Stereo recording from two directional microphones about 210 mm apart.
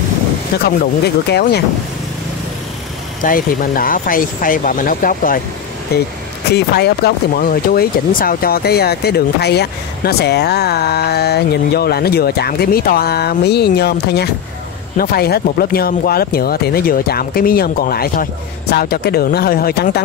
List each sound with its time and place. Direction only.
0.7 s speech: 50° left (ahead or behind)
3.2 s speech: 40° left (ahead or behind)